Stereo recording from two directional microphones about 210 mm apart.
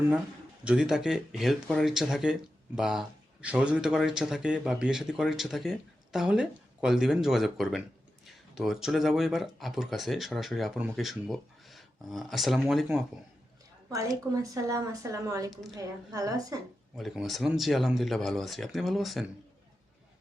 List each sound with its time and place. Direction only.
0.6 s speech: 5° right (ahead or behind)
13.9 s speech: 15° right (ahead or behind)
17.0 s speech: centre (ahead or behind)